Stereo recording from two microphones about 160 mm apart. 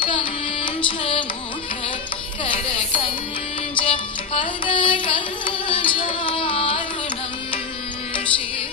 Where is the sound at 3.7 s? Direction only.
30° left (ahead or behind).